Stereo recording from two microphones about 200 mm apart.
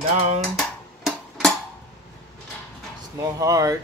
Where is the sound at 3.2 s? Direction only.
15° right (ahead or behind).